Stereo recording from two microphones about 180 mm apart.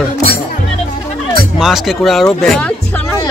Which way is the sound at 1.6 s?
Centre (ahead or behind).